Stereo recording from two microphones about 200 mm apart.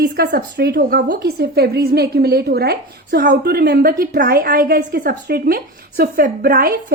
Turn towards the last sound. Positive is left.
turn(degrees=-50)  # may be behind; listen again after turning